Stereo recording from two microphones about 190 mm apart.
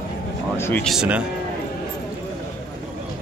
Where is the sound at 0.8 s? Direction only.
5° right (ahead or behind).